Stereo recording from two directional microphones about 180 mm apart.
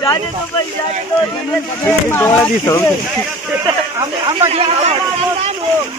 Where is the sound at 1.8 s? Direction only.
15° left (ahead or behind).